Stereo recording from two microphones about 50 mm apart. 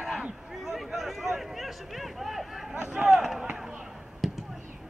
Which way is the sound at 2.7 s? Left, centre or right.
Right.